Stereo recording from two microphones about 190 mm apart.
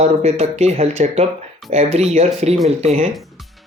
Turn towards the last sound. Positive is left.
turn(degrees=-35)  # may be behind; listen again after turning